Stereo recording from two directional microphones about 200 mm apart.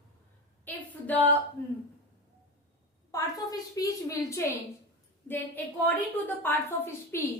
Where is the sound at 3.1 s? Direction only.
15° left (ahead or behind).